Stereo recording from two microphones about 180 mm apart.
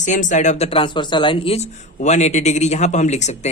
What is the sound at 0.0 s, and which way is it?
Speech, 45° left (ahead or behind).